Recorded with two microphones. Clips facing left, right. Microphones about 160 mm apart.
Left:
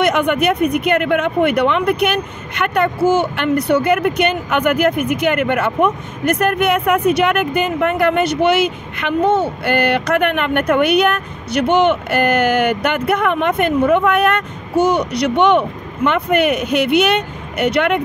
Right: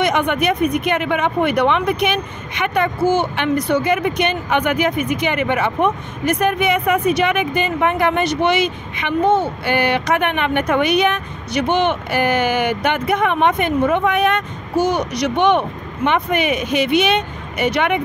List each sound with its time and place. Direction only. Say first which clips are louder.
0.0 s speech: left 2 dB; 55° left (ahead or behind)